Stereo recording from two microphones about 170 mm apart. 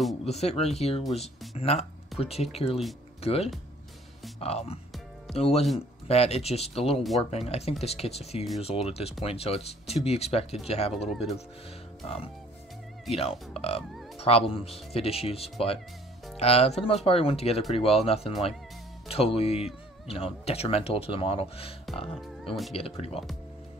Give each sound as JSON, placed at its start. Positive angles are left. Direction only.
{"t": 0.2, "sound": "speech", "side_deg": 40}
{"t": 12.0, "sound": "music", "side_deg": 35}
{"t": 13.1, "sound": "speech", "side_deg": 35}